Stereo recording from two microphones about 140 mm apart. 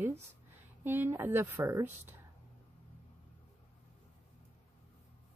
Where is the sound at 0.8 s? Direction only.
15° right (ahead or behind).